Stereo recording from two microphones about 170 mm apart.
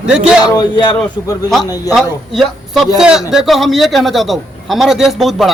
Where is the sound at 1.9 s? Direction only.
Centre (ahead or behind).